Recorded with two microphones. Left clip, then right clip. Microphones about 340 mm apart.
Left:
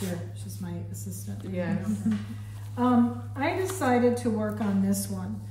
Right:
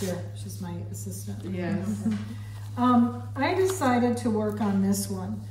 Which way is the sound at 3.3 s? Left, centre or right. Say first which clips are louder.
Right 4 dB; centre.